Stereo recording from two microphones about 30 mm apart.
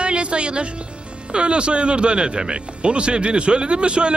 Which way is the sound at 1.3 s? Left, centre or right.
Right.